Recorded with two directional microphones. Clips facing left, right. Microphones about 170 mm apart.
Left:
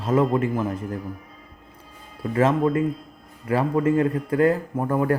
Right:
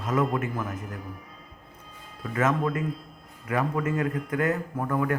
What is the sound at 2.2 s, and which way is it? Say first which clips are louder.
Speech: left 6 dB; 30° left (ahead or behind).